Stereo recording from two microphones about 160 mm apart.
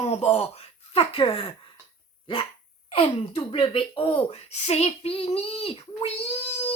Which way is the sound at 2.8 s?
35° left (ahead or behind).